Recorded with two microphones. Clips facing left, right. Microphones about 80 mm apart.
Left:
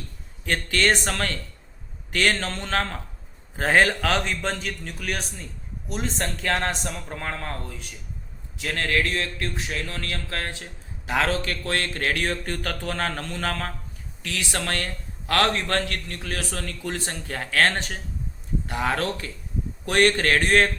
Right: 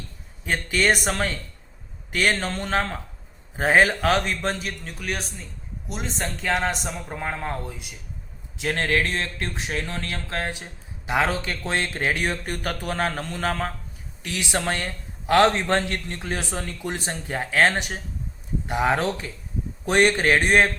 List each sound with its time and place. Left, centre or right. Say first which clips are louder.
0.4 s speech: right 1 dB; centre
8.5 s speech: right 2 dB; right